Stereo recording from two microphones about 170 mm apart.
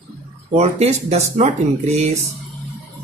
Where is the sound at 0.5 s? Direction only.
40° right (ahead or behind).